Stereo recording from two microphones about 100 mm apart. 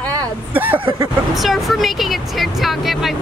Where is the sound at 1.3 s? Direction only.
Centre (ahead or behind).